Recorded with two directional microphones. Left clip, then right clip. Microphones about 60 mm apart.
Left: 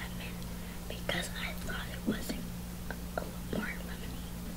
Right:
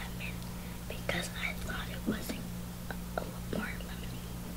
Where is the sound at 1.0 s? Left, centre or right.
Centre.